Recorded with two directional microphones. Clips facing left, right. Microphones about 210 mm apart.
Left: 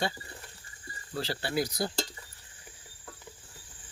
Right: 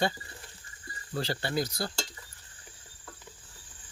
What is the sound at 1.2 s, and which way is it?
Speech, 5° left (ahead or behind).